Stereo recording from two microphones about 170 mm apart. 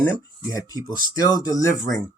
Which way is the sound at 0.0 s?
15° left (ahead or behind).